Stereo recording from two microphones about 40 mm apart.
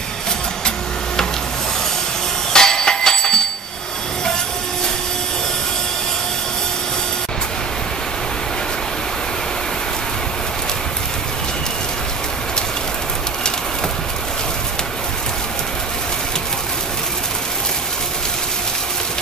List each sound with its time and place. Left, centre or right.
2.5 s bicycle bell: centre